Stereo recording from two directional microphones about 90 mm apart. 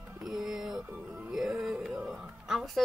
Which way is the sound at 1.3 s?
5° right (ahead or behind).